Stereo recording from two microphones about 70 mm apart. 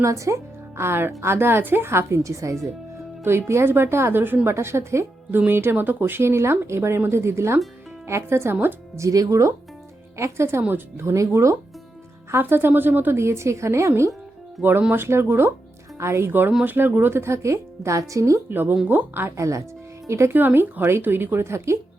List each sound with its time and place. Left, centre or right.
0.0 s speech: right
0.8 s speech: right
3.2 s speech: right
9.0 s speech: right
10.2 s speech: right
12.3 s speech: right
14.6 s speech: right
18.4 s speech: right
19.4 s speech: right
20.3 s speech: right